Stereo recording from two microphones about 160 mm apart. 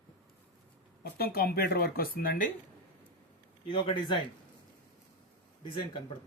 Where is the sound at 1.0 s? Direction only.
75° left (ahead or behind).